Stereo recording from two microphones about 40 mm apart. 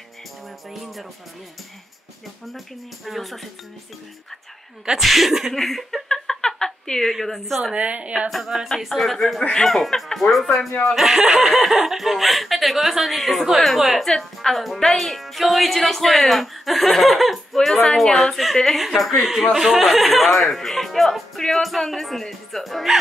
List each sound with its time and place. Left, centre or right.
0.7 s speech: centre
3.1 s speech: centre
5.0 s speech: centre
5.5 s laughter: centre
6.0 s a sound: centre
7.7 s a woman's voice: right
8.7 s speech: centre
9.4 s laughter: centre
9.7 s speech: centre
14.0 s a woman's voice: centre
21.4 s laughter: centre
21.6 s speech: centre